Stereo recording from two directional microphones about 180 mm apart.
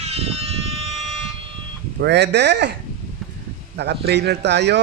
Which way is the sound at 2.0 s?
70° right (ahead or behind).